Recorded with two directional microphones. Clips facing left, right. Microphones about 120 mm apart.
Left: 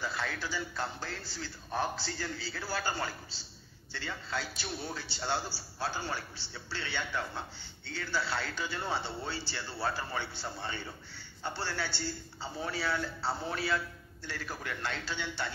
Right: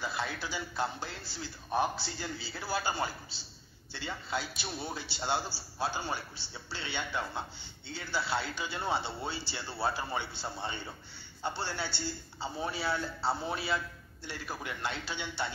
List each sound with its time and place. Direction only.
0.0 s a man's voice: 15° right (ahead or behind)